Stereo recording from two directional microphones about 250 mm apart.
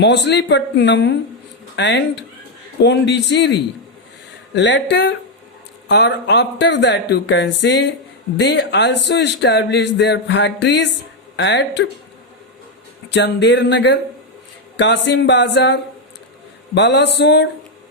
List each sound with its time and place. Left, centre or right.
0.0 s speech: left
13.1 s speech: left